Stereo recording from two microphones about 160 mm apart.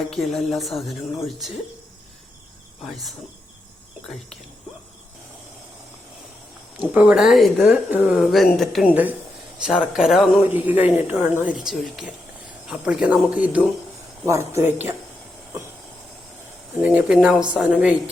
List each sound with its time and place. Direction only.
0.1 s speech: centre (ahead or behind)
2.8 s speech: centre (ahead or behind)
6.7 s speech: 10° right (ahead or behind)
8.9 s a woman's voice: 10° right (ahead or behind)
16.8 s a woman's voice: 5° right (ahead or behind)